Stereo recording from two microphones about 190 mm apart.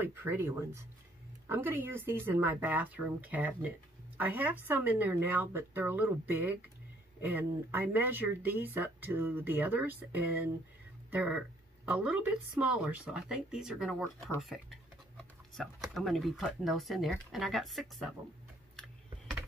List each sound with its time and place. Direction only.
0.0 s speech: 10° right (ahead or behind)
15.9 s speech: centre (ahead or behind)